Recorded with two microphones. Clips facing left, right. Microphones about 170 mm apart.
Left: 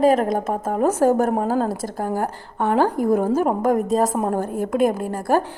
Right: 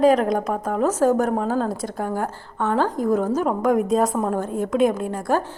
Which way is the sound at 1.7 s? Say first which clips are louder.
Left 1 dB; centre (ahead or behind).